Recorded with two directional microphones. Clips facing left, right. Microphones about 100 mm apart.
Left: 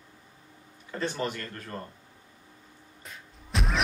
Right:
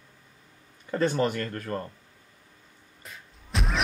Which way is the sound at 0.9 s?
50° right (ahead or behind).